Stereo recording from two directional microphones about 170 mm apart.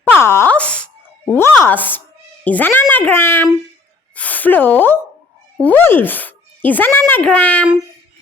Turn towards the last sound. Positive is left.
turn(degrees=5)  # may be behind; listen again after turning